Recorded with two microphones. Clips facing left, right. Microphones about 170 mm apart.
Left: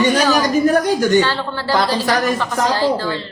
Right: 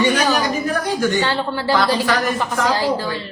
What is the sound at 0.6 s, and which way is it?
Speech, 40° left (ahead or behind).